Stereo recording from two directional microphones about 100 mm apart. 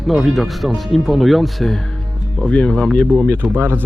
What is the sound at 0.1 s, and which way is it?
Speech, centre (ahead or behind).